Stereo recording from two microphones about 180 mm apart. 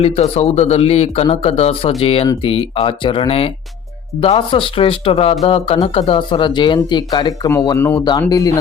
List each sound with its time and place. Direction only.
0.0 s speech: 35° left (ahead or behind); by 8.5 s 20° left (ahead or behind)